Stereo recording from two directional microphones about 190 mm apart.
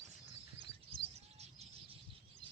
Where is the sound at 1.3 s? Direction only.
35° right (ahead or behind).